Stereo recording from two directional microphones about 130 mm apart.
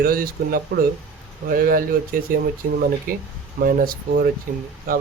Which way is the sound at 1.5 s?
90° right.